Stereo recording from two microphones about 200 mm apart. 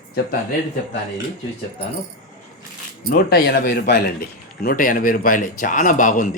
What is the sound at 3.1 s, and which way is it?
Speech, 50° left (ahead or behind).